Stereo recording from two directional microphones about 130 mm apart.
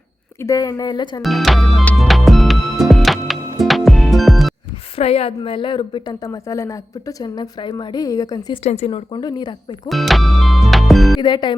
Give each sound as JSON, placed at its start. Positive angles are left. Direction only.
{"t": 0.4, "sound": "a woman's voice", "side_deg": 30}
{"t": 1.2, "sound": "speech", "side_deg": 0}
{"t": 2.0, "sound": "music", "side_deg": 0}
{"t": 4.9, "sound": "a woman's voice", "side_deg": 50}
{"t": 8.6, "sound": "speech", "side_deg": 50}
{"t": 9.1, "sound": "a woman's voice", "side_deg": 35}
{"t": 9.9, "sound": "music", "side_deg": 0}
{"t": 11.2, "sound": "a woman's voice", "side_deg": 35}